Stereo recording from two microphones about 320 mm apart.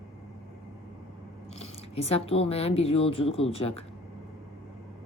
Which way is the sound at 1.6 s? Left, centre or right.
Centre.